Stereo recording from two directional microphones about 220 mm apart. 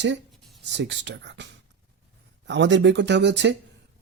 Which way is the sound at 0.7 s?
55° right (ahead or behind).